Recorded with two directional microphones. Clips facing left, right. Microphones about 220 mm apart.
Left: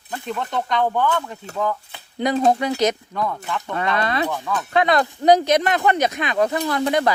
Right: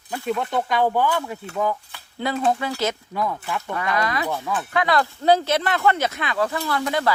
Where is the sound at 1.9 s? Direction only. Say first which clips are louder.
Left 5 dB; 20° left (ahead or behind).